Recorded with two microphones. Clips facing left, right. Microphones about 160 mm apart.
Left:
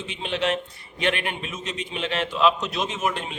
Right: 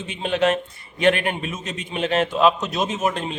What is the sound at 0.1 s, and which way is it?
A man's voice, 45° right (ahead or behind).